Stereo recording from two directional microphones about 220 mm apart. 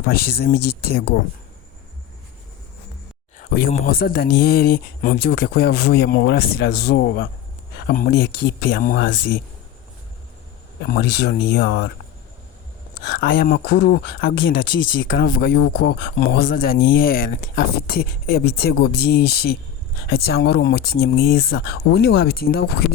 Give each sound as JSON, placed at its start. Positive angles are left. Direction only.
{"t": 0.1, "sound": "speech", "side_deg": 45}
{"t": 3.3, "sound": "a sound", "side_deg": 40}
{"t": 3.8, "sound": "speech", "side_deg": 45}
{"t": 10.8, "sound": "speech", "side_deg": 45}
{"t": 13.1, "sound": "speech", "side_deg": 50}